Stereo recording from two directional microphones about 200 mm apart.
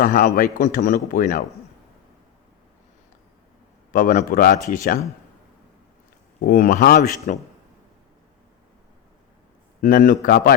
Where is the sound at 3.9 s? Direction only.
45° left (ahead or behind).